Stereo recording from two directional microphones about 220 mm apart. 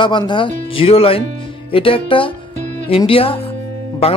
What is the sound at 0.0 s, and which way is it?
Speech, 20° left (ahead or behind).